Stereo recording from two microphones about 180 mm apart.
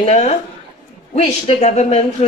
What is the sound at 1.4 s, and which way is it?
Speech, 35° left (ahead or behind).